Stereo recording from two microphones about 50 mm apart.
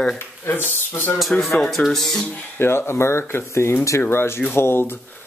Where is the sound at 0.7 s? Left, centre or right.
Left.